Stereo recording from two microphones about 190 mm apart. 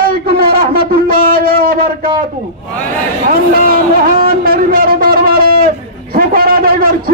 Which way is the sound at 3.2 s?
50° right (ahead or behind).